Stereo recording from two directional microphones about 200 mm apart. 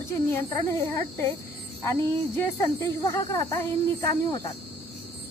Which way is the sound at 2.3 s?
10° left (ahead or behind).